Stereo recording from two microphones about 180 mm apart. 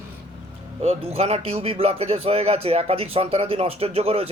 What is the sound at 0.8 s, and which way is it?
Speech, 35° right (ahead or behind).